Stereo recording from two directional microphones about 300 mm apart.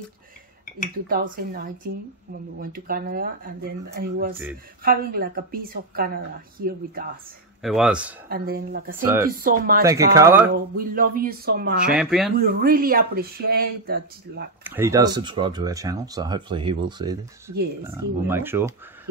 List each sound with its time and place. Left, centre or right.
1.1 s a woman's voice: right
7.6 s speech: centre
8.3 s speech: right
9.0 s speech: centre
9.4 s a woman's voice: right
9.8 s speech: centre
10.5 s a woman's voice: right
11.8 s speech: centre
12.4 s a woman's voice: right
14.6 s speech: centre